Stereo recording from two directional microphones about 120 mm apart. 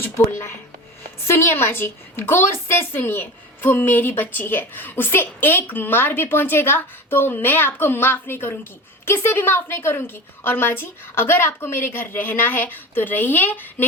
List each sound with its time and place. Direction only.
0.0 s a woman's voice: 20° left (ahead or behind)